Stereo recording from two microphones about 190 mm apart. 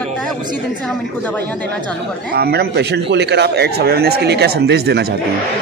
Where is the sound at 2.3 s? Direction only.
55° right (ahead or behind).